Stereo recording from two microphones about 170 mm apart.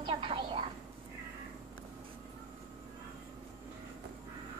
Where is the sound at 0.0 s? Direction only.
30° right (ahead or behind).